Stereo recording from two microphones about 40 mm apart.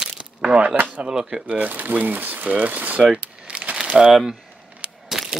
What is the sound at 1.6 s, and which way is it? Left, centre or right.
Speech, right.